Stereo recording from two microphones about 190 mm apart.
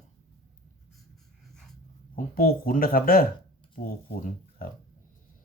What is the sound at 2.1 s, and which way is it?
Speech, 50° left (ahead or behind).